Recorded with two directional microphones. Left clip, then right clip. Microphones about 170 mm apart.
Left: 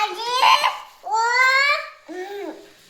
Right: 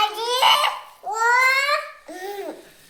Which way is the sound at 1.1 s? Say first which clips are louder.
Even; 15° right (ahead or behind).